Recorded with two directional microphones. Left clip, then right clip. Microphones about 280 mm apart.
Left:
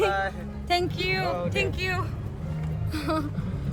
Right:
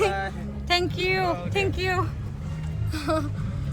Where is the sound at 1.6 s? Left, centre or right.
Centre.